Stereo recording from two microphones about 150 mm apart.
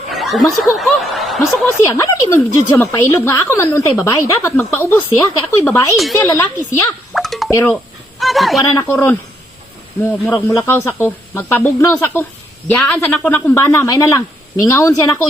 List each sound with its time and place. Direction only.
0.1 s speech: centre (ahead or behind)
1.8 s a woman's voice: 20° left (ahead or behind)
7.1 s music: centre (ahead or behind)
7.5 s speech: 15° left (ahead or behind)
8.2 s speech: centre (ahead or behind)
8.7 s speech: 15° left (ahead or behind)
13.6 s a woman's voice: 20° left (ahead or behind)